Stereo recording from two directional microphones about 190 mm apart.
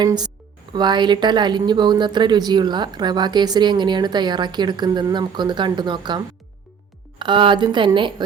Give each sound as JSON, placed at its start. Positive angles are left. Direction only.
{"t": 0.0, "sound": "speech", "side_deg": -20}